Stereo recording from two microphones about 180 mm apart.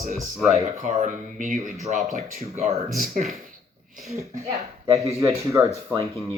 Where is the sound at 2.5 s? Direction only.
35° right (ahead or behind).